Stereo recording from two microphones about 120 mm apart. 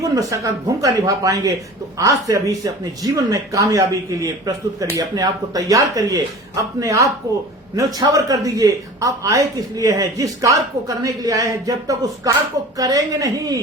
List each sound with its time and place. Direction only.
0.0 s speech: 30° right (ahead or behind)